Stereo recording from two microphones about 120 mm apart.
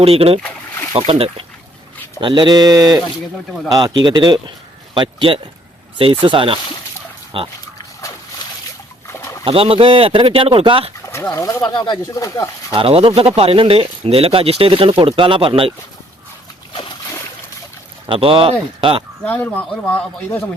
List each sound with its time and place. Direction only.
0.0 s speech: 55° right (ahead or behind)
2.2 s speech: 40° right (ahead or behind)
9.4 s speech: 50° right (ahead or behind)
11.1 s speech: 20° left (ahead or behind)
11.7 s speech: 35° left (ahead or behind)
12.7 s speech: 55° right (ahead or behind)
18.0 s speech: 45° right (ahead or behind)
19.2 s speech: 15° left (ahead or behind)